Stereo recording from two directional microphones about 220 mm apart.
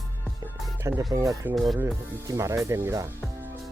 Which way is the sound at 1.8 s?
15° right (ahead or behind).